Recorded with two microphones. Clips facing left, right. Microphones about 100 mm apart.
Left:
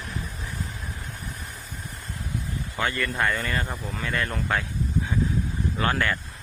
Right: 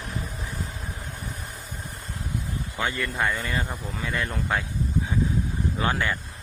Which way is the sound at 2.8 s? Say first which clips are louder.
Left 1 dB; 10° right (ahead or behind).